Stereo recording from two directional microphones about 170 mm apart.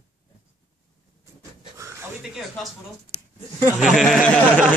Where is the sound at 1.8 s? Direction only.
15° right (ahead or behind).